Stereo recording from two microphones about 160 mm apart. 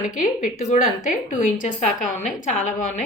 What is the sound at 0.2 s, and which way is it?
A woman's voice, 55° left (ahead or behind).